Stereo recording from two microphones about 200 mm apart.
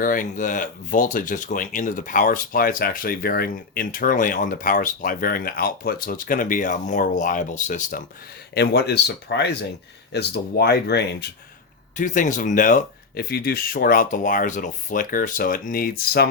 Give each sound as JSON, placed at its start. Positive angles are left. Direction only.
{"t": 0.0, "sound": "speech", "side_deg": 40}
{"t": 8.5, "sound": "speech", "side_deg": 55}
{"t": 11.9, "sound": "speech", "side_deg": 40}